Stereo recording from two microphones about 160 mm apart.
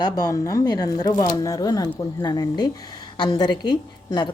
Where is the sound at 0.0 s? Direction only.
25° left (ahead or behind).